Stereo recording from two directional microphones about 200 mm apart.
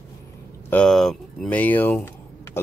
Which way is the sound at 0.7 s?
5° left (ahead or behind).